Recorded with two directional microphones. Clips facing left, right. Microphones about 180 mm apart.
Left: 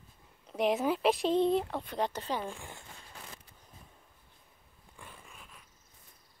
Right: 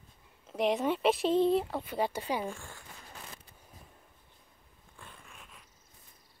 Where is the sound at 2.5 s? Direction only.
15° left (ahead or behind).